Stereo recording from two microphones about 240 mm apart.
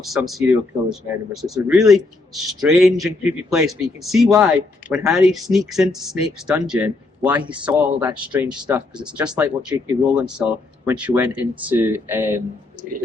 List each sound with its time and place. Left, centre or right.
0.0 s speech: centre
8.4 s speech: centre
9.0 s speech: centre
9.4 s speech: centre
10.1 s speech: centre